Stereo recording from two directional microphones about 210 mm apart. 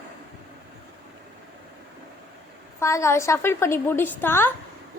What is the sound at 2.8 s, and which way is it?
A woman's voice, 15° left (ahead or behind).